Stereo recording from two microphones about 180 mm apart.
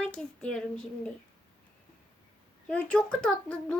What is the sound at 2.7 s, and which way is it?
A child's voice, 5° left (ahead or behind).